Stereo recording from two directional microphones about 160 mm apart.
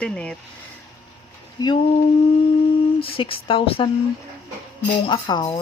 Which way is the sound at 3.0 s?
35° left (ahead or behind).